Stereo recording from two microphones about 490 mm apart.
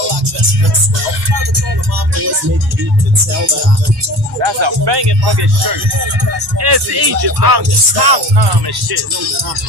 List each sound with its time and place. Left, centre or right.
4.4 s speech: right